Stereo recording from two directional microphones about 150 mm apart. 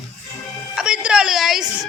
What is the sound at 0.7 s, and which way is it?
Speech, 5° right (ahead or behind).